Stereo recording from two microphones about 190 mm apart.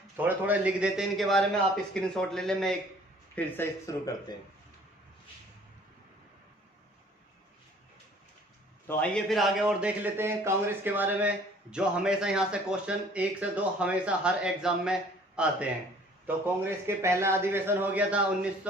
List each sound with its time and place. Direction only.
0.2 s a man's voice: 10° right (ahead or behind)
3.3 s speech: 15° left (ahead or behind)
8.9 s a man's voice: 5° left (ahead or behind)